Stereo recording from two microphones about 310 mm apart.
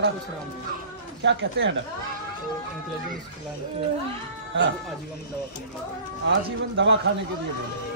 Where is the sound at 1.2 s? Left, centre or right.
Right.